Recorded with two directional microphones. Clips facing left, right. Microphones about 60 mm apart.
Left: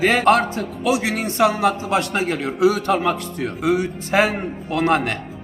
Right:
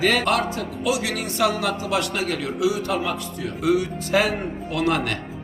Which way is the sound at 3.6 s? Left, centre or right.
Left.